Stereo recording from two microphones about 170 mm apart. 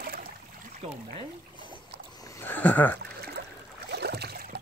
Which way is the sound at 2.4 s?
10° left (ahead or behind).